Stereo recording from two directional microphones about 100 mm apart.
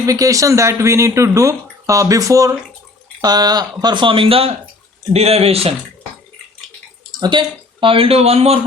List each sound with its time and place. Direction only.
0.0 s speech: 35° right (ahead or behind); by 4.5 s 70° right (ahead or behind)
5.1 s speech: 90° right
7.1 s speech: 50° right (ahead or behind); by 8.5 s 90° right